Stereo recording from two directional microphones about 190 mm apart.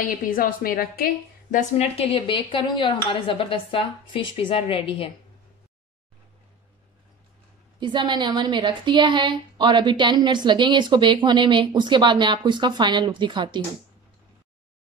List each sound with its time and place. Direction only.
0.0 s a woman's voice: 45° left (ahead or behind); by 5.1 s 30° left (ahead or behind)
7.8 s a woman's voice: 25° right (ahead or behind)